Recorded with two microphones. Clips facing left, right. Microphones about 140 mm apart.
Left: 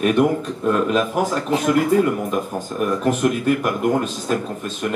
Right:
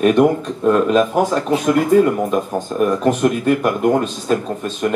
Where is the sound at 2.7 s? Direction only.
35° right (ahead or behind).